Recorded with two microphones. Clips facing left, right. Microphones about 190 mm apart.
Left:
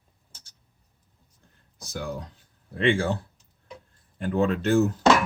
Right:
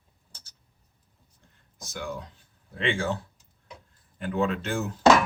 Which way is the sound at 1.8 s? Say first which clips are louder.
Left 2 dB; 35° left (ahead or behind).